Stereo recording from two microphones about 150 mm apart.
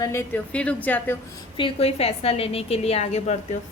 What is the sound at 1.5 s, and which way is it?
A woman's voice, 40° left (ahead or behind).